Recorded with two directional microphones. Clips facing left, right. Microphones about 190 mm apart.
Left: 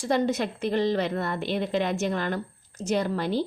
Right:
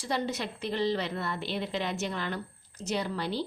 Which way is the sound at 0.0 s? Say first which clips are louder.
Left 7 dB; 50° left (ahead or behind).